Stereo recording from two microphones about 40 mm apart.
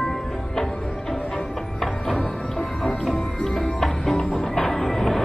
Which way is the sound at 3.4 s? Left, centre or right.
Centre.